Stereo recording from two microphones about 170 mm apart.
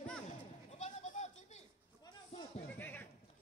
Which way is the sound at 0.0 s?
5° left (ahead or behind).